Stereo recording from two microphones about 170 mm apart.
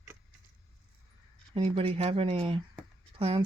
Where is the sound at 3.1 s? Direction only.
35° right (ahead or behind).